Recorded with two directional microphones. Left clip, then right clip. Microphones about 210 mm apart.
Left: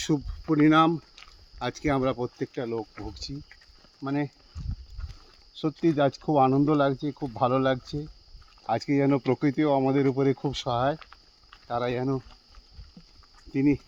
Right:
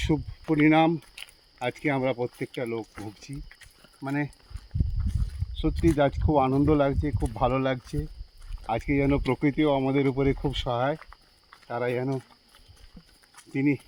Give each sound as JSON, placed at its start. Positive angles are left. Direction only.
{"t": 0.1, "sound": "speech", "side_deg": 15}
{"t": 1.2, "sound": "cricket", "side_deg": -55}
{"t": 1.5, "sound": "speech", "side_deg": 10}
{"t": 4.0, "sound": "speech", "side_deg": 0}
{"t": 5.8, "sound": "speech", "side_deg": 10}
{"t": 13.5, "sound": "speech", "side_deg": 10}